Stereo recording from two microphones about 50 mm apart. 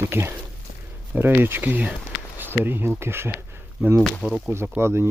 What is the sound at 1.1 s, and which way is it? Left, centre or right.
Speech, right.